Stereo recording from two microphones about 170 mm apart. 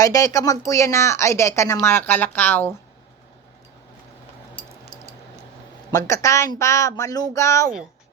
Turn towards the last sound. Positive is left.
turn(degrees=15)  # may be behind; listen again after turning